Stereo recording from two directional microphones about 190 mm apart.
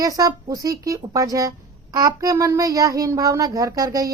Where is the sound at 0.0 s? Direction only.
20° right (ahead or behind).